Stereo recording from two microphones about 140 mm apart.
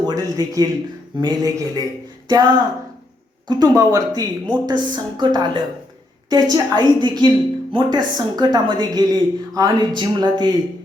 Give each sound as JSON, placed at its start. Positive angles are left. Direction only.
{"t": 0.1, "sound": "speech", "side_deg": -25}